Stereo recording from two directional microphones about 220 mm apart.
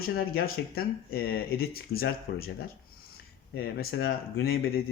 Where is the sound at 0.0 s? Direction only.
45° left (ahead or behind).